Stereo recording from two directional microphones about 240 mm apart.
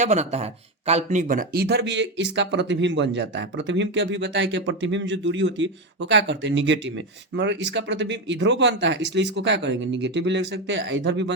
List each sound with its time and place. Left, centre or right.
0.0 s speech: right